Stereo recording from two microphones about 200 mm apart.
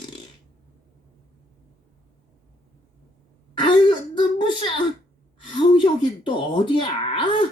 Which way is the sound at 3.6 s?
25° left (ahead or behind).